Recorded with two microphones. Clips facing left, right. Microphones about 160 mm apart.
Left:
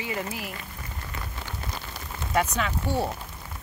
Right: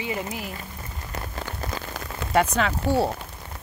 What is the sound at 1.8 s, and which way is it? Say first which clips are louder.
Rain on surface: right 4 dB; 75° right (ahead or behind).